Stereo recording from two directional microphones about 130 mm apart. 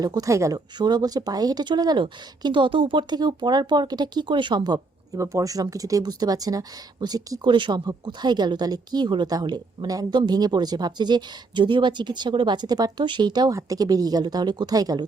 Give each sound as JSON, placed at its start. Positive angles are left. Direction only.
{"t": 0.0, "sound": "speech", "side_deg": -30}